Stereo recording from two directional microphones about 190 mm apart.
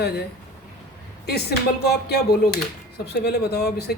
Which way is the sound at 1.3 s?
60° left (ahead or behind).